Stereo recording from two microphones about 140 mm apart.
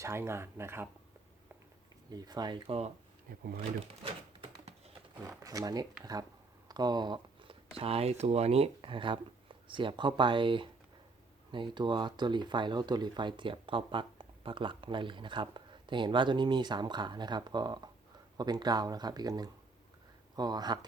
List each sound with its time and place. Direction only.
0.0 s speech: 20° right (ahead or behind)
2.0 s speech: 30° right (ahead or behind); by 2.9 s 45° right (ahead or behind)
3.3 s speech: 90° right
5.4 s speech: 25° right (ahead or behind)
6.7 s a sound: 30° right (ahead or behind)
7.8 s speech: 45° right (ahead or behind)